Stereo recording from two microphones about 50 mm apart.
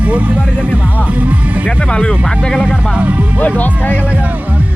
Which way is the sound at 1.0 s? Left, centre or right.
Right.